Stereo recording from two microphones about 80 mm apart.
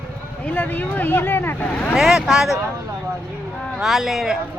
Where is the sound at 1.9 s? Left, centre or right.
Centre.